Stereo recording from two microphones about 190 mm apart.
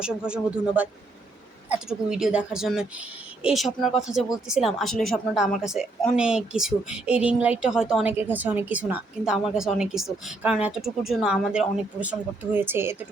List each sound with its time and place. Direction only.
0.0 s a woman's voice: 5° right (ahead or behind)